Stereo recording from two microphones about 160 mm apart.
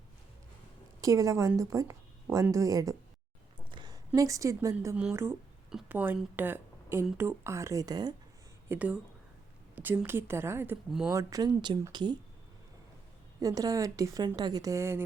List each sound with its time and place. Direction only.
1.0 s a woman's voice: 20° right (ahead or behind)
8.7 s a woman's voice: 10° right (ahead or behind); by 12.1 s 30° right (ahead or behind)
13.4 s a woman's voice: 20° right (ahead or behind)